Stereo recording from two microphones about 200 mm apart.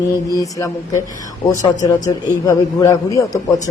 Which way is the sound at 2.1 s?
15° left (ahead or behind).